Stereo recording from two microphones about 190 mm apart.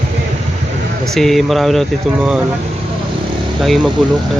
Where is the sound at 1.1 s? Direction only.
Centre (ahead or behind).